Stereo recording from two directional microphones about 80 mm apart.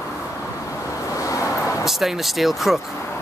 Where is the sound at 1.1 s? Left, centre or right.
Left.